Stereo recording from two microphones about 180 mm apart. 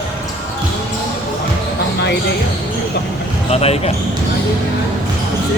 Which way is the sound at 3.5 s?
35° left (ahead or behind).